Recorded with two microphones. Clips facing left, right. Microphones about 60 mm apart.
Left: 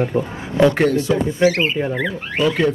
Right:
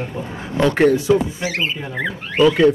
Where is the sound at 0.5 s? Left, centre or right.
Centre.